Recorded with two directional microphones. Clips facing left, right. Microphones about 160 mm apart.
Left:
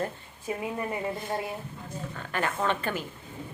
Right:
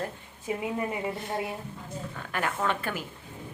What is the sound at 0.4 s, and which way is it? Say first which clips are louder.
Speech: right 1 dB; 15° right (ahead or behind).